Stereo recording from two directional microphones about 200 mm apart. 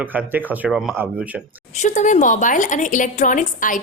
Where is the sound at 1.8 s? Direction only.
35° left (ahead or behind).